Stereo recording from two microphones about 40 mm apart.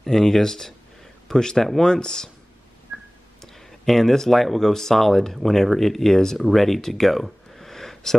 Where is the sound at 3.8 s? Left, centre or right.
Centre.